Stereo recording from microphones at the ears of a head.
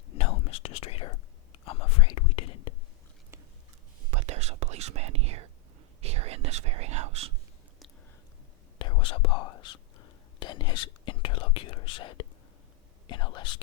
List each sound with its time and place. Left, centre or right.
0.1 s whispering: left
4.1 s whispering: right
8.8 s whispering: left